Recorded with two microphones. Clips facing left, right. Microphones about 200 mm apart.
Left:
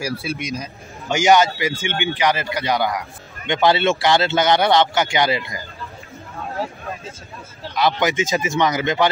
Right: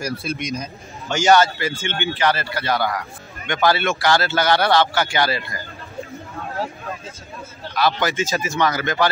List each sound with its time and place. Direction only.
0.0 s a man's voice: 5° left (ahead or behind)
1.0 s a man's voice: 15° left (ahead or behind)
7.7 s a man's voice: 20° left (ahead or behind)